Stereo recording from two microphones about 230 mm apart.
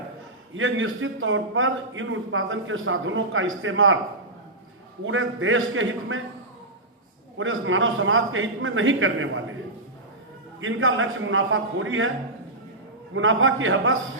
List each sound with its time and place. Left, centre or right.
0.5 s a man's voice: right
5.0 s a man's voice: right
7.3 s a man's voice: right
10.6 s a man's voice: right
13.1 s a man's voice: right